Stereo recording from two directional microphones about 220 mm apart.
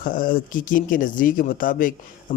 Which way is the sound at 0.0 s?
40° left (ahead or behind).